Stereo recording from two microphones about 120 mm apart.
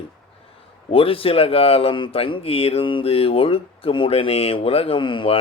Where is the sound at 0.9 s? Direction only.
50° left (ahead or behind).